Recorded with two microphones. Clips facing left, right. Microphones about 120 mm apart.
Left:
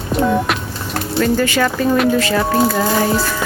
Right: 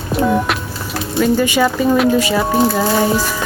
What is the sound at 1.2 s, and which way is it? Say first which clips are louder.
Speech: right 2 dB; 15° right (ahead or behind).